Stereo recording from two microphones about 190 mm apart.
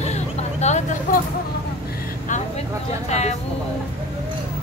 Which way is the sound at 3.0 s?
35° left (ahead or behind).